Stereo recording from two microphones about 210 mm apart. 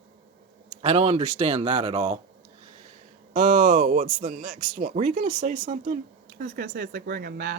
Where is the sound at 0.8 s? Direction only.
30° right (ahead or behind).